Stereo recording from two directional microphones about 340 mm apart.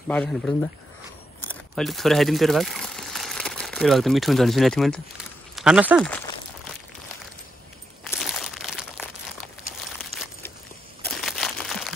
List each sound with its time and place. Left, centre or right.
0.1 s a man's voice: centre
8.0 s crumpling: centre
11.1 s a sound: centre